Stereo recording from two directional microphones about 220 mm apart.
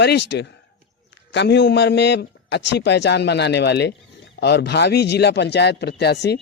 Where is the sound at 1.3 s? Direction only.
50° left (ahead or behind).